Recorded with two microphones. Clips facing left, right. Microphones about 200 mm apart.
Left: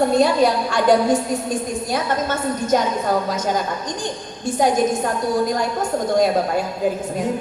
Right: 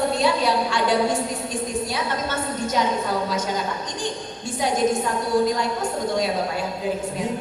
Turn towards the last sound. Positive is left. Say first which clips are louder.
# left 6 dB
turn(degrees=45)  # may be behind; listen again after turning